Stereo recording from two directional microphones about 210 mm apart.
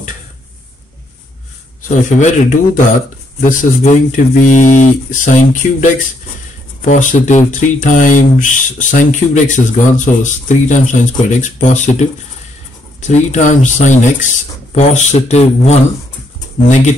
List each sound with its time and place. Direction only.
1.8 s speech: 40° left (ahead or behind)